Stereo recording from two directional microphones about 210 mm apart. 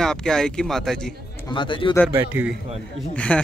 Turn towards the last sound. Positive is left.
turn(degrees=5)  # may be behind; listen again after turning